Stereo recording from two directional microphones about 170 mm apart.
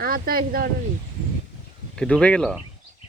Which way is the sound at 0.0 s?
60° right (ahead or behind).